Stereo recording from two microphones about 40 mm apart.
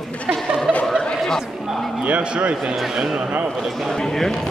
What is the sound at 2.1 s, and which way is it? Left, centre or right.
Speech, right.